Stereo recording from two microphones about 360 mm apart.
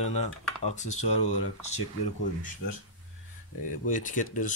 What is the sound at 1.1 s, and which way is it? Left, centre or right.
Speech, left.